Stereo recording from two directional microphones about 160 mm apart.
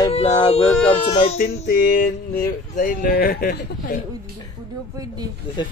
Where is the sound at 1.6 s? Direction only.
65° left (ahead or behind).